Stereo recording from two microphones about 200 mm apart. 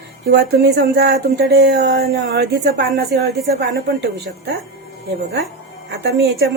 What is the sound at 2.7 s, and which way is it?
A woman's voice, 55° right (ahead or behind).